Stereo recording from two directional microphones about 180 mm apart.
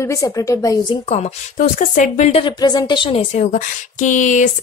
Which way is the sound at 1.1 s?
40° left (ahead or behind).